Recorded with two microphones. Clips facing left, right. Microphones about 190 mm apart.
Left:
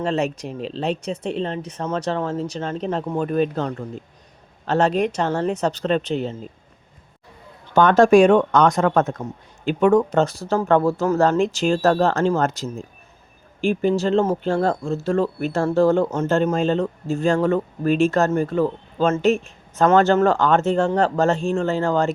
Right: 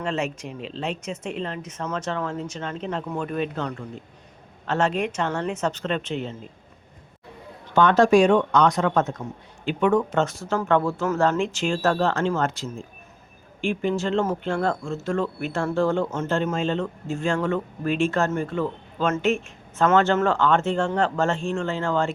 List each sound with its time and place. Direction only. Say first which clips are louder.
0.0 s speech: left 5 dB; 35° left (ahead or behind)
7.8 s speech: left 4 dB; 50° left (ahead or behind)
9.6 s speech: left 5 dB; 40° left (ahead or behind)